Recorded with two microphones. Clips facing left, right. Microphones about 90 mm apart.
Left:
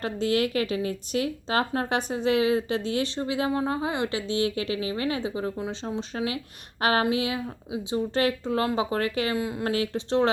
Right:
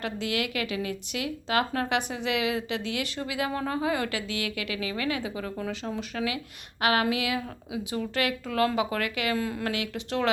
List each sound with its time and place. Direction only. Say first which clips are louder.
0.0 s a woman's voice: left 5 dB; 35° left (ahead or behind)
9.3 s speech: left 1 dB; 20° left (ahead or behind)
9.7 s a woman's voice: left 5 dB; 35° left (ahead or behind)